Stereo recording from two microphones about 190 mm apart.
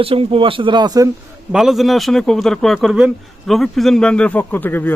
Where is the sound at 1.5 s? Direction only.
Centre (ahead or behind).